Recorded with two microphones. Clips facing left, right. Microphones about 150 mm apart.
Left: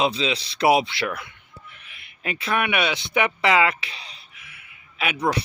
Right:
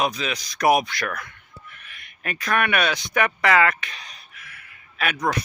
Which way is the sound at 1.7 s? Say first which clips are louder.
Right 2 dB; 20° left (ahead or behind).